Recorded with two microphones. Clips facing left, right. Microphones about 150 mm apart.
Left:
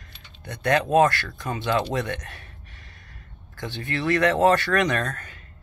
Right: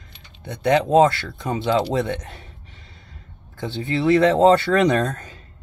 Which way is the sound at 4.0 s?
25° right (ahead or behind).